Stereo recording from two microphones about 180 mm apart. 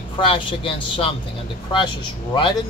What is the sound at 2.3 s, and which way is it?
Speech, 25° left (ahead or behind).